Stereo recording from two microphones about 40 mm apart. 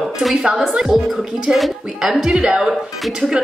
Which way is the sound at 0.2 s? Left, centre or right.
Centre.